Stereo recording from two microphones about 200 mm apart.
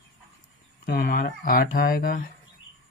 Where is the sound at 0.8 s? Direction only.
50° left (ahead or behind).